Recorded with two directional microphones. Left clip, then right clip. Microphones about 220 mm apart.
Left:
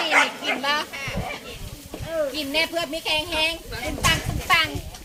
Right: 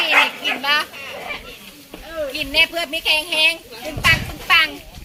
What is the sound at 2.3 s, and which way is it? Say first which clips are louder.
A woman's voice: right 6 dB; centre (ahead or behind).